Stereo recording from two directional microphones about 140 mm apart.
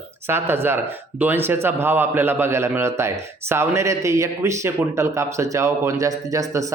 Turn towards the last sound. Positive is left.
turn(degrees=-25)  # may be behind; listen again after turning